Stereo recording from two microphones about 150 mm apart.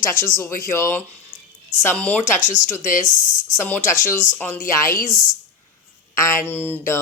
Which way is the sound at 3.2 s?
60° left (ahead or behind).